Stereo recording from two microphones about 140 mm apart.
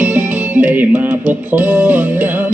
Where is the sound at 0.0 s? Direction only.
10° right (ahead or behind).